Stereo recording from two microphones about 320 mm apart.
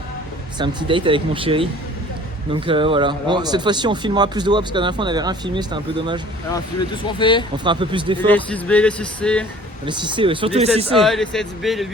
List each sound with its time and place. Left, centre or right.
0.6 s speech: centre
7.2 s speech: centre
7.5 s speech: centre
8.3 s speech: centre
9.8 s speech: centre
10.9 s speech: centre